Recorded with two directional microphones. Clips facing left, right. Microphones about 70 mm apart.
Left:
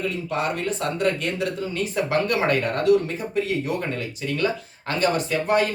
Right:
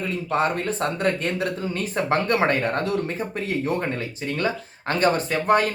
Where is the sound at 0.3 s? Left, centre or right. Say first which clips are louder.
Right 5 dB; right.